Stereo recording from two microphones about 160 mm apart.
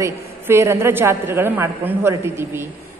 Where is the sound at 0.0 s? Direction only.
15° right (ahead or behind).